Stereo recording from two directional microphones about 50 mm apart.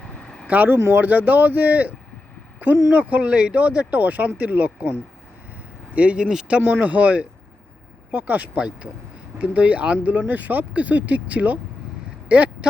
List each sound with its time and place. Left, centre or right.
0.4 s speech: right
0.8 s speech: right
1.0 s speech: right
6.6 s speech: right